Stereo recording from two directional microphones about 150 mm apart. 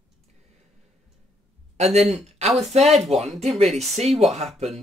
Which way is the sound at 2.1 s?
45° right (ahead or behind).